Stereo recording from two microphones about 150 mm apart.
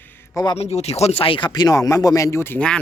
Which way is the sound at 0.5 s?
45° left (ahead or behind).